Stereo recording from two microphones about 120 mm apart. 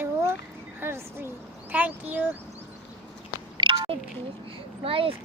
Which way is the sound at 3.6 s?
45° right (ahead or behind).